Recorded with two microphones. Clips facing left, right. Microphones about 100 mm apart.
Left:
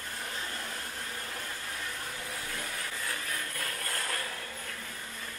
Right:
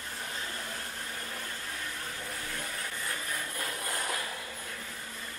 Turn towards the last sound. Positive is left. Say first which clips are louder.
# right 1 dB
turn(degrees=-15)  # may be behind; listen again after turning